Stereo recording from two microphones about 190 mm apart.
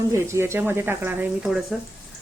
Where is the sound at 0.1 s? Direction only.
15° right (ahead or behind).